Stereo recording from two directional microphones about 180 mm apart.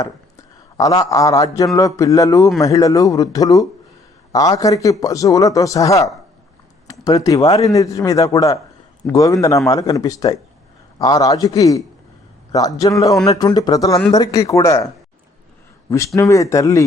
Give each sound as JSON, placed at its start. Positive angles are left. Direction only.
{"t": 0.8, "sound": "a man's voice", "side_deg": 20}
{"t": 16.1, "sound": "speech", "side_deg": 15}